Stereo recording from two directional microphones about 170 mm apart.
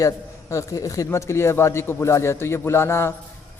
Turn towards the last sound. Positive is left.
turn(degrees=15)  # may be behind; listen again after turning